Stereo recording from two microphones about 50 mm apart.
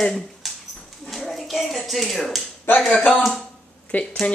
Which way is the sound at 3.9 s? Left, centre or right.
Left.